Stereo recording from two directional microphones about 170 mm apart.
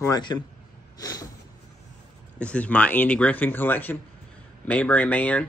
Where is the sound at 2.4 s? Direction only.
5° left (ahead or behind).